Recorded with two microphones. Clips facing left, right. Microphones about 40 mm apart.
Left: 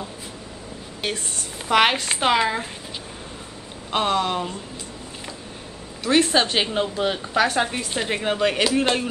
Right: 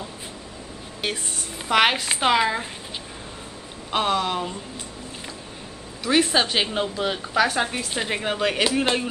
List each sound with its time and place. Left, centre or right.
1.0 s a woman's voice: centre
3.9 s a woman's voice: centre
6.0 s a woman's voice: centre